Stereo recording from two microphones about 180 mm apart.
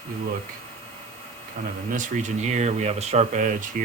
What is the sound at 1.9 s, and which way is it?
Speech, 45° right (ahead or behind).